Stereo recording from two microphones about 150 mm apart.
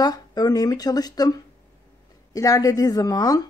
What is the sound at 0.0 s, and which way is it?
A woman's voice, 25° left (ahead or behind).